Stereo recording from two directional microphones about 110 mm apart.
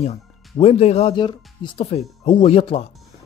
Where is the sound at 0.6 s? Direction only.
70° left (ahead or behind).